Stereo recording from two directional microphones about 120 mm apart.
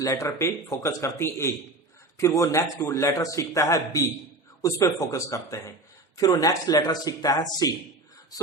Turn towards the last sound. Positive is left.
turn(degrees=30)  # may be behind; listen again after turning